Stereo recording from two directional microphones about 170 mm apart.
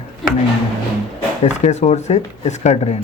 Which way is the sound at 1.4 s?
40° left (ahead or behind).